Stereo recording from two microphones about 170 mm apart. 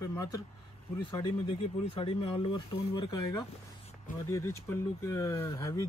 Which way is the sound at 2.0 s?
30° left (ahead or behind).